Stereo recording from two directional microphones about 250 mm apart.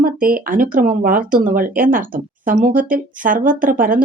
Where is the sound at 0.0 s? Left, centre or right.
Right.